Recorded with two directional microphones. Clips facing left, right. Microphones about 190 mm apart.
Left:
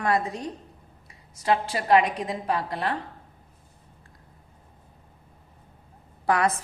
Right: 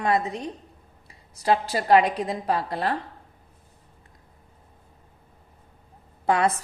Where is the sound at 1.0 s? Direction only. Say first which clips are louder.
Right 2 dB; 35° right (ahead or behind).